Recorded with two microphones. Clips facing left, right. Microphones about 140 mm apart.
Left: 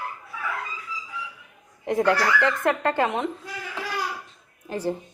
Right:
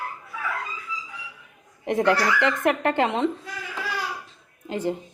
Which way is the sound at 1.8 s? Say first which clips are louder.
Even; 20° right (ahead or behind).